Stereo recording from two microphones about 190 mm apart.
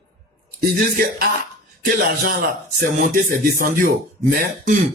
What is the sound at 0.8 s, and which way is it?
Music, 50° right (ahead or behind).